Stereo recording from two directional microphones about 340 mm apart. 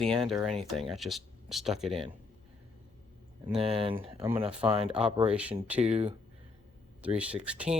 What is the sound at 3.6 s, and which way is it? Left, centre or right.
Speech, centre.